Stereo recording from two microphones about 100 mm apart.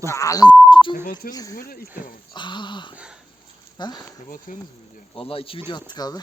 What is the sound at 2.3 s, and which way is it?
Speech, 50° left (ahead or behind).